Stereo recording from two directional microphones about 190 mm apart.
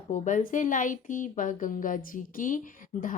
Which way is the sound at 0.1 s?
40° left (ahead or behind).